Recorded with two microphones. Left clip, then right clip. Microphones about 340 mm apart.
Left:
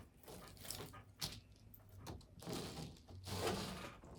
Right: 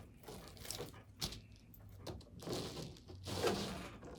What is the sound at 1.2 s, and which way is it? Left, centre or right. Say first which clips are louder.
Vehicle: right 3 dB; centre.